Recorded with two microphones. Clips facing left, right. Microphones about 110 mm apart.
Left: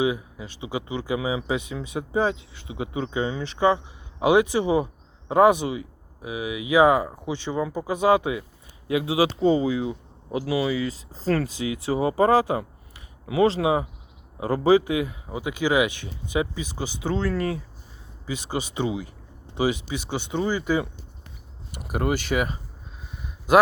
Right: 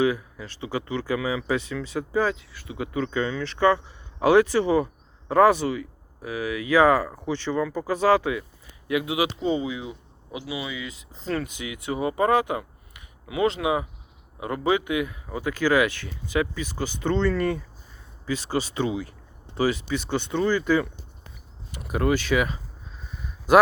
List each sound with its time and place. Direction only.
0.0 s speech: 15° left (ahead or behind)
15.3 s speech: 15° left (ahead or behind)
18.3 s speech: 15° left (ahead or behind)
21.9 s speech: 15° left (ahead or behind)
22.3 s speech: 45° left (ahead or behind)